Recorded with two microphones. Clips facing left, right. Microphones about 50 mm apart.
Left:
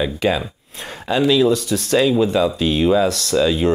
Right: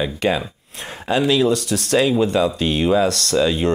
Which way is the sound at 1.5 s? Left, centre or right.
Right.